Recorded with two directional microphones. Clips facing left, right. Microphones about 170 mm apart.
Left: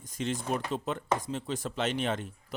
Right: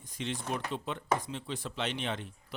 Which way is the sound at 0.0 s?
45° left (ahead or behind).